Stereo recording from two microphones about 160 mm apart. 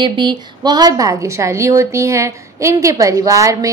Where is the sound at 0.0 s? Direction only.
30° right (ahead or behind).